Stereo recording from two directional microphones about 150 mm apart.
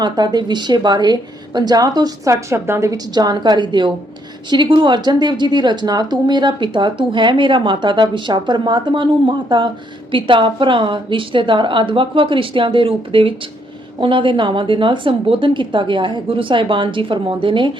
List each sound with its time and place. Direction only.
0.0 s a woman's voice: 30° right (ahead or behind)